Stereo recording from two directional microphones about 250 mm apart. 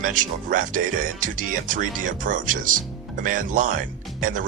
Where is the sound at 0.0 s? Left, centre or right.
Right.